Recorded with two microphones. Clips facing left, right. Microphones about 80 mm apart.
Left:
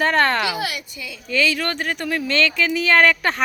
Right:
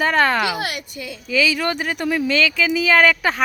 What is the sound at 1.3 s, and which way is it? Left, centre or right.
Speech, centre.